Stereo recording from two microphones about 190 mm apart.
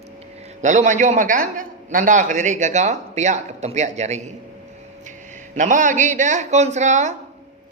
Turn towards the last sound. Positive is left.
turn(degrees=-40)  # may be behind; listen again after turning